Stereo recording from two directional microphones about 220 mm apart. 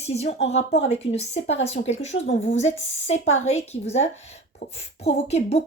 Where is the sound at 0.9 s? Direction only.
30° left (ahead or behind).